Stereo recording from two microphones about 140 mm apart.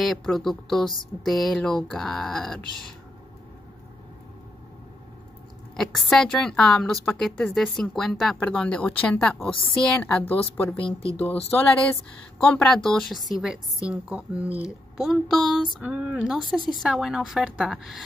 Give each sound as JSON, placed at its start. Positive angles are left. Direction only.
{"t": 0.0, "sound": "a woman's voice", "side_deg": 0}
{"t": 5.8, "sound": "a woman's voice", "side_deg": 5}